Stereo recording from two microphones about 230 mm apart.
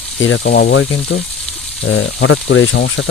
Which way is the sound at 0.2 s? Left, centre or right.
Left.